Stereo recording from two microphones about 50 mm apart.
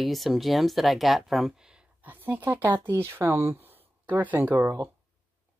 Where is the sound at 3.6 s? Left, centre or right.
Right.